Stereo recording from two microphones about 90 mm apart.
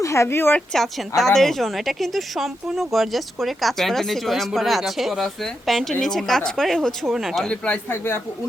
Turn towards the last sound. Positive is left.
turn(degrees=15)  # may be behind; listen again after turning